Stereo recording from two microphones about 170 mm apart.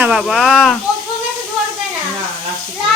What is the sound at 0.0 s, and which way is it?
Speech, 5° right (ahead or behind).